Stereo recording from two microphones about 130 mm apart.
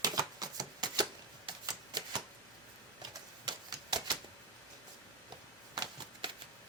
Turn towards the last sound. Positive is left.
turn(degrees=-35)  # may be behind; listen again after turning